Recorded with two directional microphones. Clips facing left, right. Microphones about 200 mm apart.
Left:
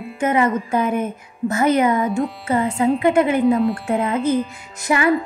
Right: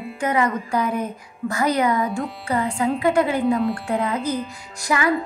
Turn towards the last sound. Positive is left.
turn(degrees=25)  # may be behind; listen again after turning